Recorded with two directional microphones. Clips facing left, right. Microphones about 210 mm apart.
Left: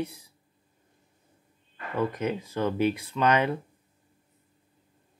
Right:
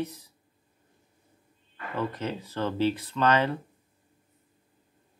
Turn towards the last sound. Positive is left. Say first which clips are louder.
# even
turn(degrees=15)  # may be behind; listen again after turning